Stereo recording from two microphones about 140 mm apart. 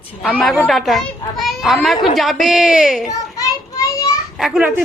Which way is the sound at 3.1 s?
25° left (ahead or behind).